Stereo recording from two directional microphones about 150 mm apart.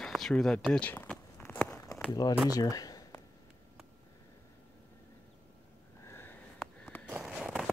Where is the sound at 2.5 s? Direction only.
25° left (ahead or behind).